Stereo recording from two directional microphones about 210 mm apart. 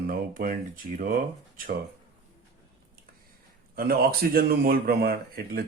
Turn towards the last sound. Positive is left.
turn(degrees=-45)  # may be behind; listen again after turning